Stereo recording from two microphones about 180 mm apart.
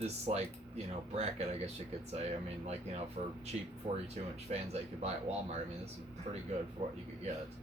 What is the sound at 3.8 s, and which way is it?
Speech, 35° right (ahead or behind).